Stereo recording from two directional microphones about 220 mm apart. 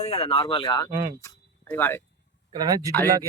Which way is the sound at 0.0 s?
25° left (ahead or behind).